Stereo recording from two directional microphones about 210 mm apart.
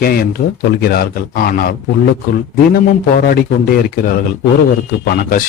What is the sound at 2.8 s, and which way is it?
Speech, 45° left (ahead or behind).